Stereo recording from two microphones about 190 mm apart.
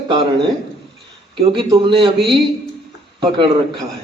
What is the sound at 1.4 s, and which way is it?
Speech, 30° right (ahead or behind).